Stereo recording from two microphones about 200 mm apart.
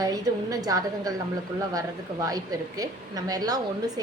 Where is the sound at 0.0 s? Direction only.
20° right (ahead or behind).